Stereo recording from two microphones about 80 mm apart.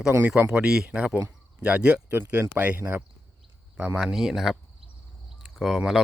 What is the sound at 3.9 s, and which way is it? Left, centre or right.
Speech, centre.